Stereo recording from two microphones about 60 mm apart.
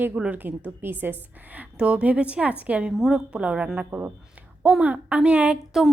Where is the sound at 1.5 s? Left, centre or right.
Centre.